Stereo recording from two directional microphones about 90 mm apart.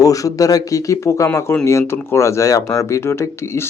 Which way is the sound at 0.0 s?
40° left (ahead or behind).